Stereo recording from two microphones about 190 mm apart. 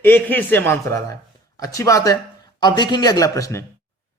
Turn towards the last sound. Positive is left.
turn(degrees=15)  # may be behind; listen again after turning